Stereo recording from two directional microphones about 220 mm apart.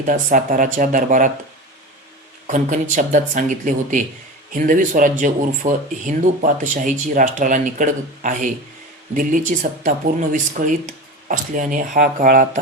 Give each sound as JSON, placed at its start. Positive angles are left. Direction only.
{"t": 0.0, "sound": "speech", "side_deg": -35}
{"t": 2.5, "sound": "speech", "side_deg": -35}
{"t": 9.8, "sound": "speech", "side_deg": -35}